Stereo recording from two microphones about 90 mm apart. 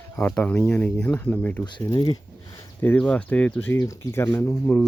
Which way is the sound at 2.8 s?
20° left (ahead or behind).